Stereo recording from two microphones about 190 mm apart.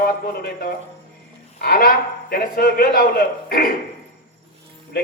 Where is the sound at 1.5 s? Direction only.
50° left (ahead or behind).